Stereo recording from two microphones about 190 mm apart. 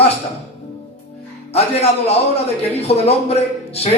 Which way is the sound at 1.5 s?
35° left (ahead or behind).